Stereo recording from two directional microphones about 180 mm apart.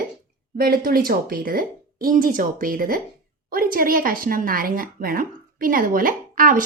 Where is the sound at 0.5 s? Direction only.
55° right (ahead or behind).